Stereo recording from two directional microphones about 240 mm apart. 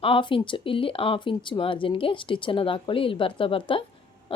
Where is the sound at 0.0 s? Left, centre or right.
Left.